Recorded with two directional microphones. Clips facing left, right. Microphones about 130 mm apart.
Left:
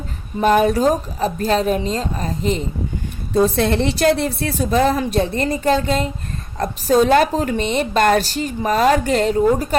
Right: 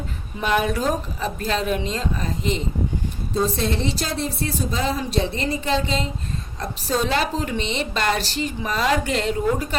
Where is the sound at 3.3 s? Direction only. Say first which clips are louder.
Left 7 dB; 65° left (ahead or behind).